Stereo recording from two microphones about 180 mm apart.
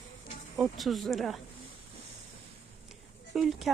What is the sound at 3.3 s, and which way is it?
Speech, centre (ahead or behind).